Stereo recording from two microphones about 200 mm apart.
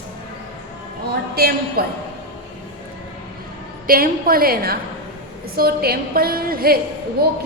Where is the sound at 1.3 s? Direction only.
50° right (ahead or behind).